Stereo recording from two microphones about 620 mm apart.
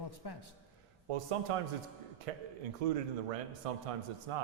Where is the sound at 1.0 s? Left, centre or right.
Right.